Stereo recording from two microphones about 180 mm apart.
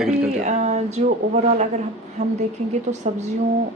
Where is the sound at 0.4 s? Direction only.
40° right (ahead or behind).